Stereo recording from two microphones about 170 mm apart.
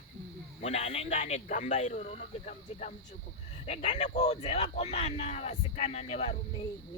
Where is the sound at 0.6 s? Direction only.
40° left (ahead or behind).